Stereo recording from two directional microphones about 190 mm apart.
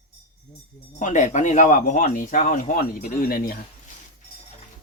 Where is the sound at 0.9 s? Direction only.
40° left (ahead or behind).